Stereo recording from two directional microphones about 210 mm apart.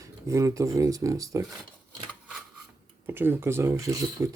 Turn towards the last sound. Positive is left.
turn(degrees=-15)  # may be behind; listen again after turning